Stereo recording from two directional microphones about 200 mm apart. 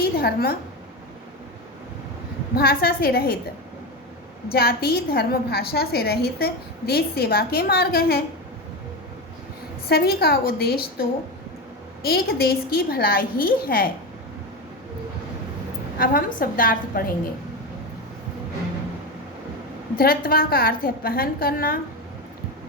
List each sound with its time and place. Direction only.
0.0 s a woman's voice: 50° left (ahead or behind)
2.6 s a woman's voice: 50° left (ahead or behind)
4.5 s a woman's voice: 50° left (ahead or behind)
9.9 s a woman's voice: 50° left (ahead or behind)
12.0 s a woman's voice: 50° left (ahead or behind)
16.0 s a woman's voice: 45° left (ahead or behind)
20.0 s a woman's voice: 50° left (ahead or behind)